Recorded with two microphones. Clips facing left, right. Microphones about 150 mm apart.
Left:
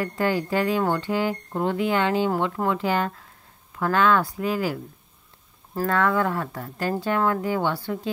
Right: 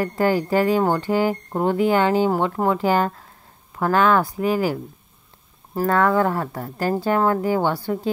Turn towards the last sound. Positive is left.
turn(degrees=-35)  # may be behind; listen again after turning